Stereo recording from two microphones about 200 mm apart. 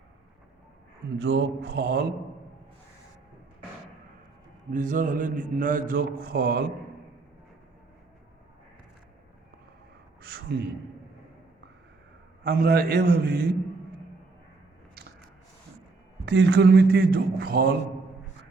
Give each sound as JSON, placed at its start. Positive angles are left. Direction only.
{"t": 1.2, "sound": "mantra", "side_deg": -55}
{"t": 4.7, "sound": "mantra", "side_deg": -40}
{"t": 10.2, "sound": "gasp", "side_deg": -55}
{"t": 12.5, "sound": "mantra", "side_deg": -50}
{"t": 16.2, "sound": "mantra", "side_deg": -60}